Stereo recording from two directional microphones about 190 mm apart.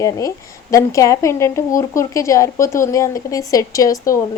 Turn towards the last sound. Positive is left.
turn(degrees=15)  # may be behind; listen again after turning